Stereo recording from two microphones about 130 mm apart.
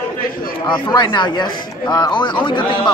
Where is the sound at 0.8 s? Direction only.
35° left (ahead or behind).